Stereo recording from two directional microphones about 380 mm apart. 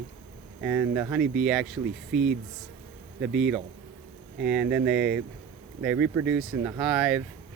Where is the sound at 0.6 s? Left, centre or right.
Centre.